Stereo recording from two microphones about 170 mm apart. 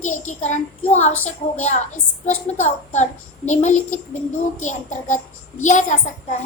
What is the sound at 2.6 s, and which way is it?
A child's voice, 45° left (ahead or behind).